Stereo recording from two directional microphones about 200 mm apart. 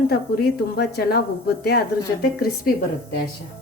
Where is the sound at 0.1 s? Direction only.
50° left (ahead or behind).